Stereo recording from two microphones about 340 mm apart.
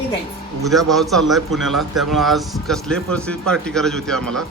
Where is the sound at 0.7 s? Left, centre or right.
Centre.